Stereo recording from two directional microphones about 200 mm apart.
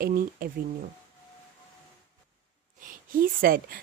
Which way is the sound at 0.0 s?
45° right (ahead or behind).